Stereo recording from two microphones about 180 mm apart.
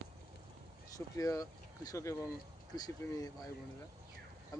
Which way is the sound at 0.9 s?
20° left (ahead or behind).